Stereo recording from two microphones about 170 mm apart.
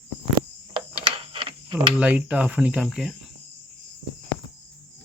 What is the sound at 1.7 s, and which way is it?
Speech, 10° right (ahead or behind).